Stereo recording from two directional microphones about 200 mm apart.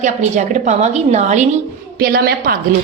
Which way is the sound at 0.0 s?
35° right (ahead or behind).